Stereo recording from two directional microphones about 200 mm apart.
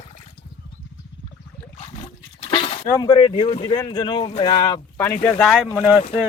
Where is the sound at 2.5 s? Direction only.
25° left (ahead or behind).